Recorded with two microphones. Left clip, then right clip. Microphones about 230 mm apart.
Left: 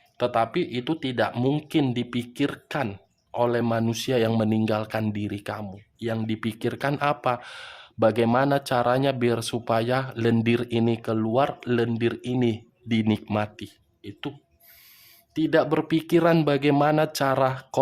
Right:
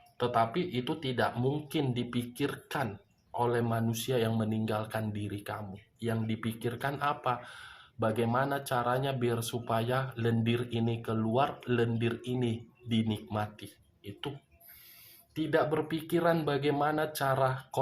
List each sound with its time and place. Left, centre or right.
0.2 s speech: left
15.4 s speech: left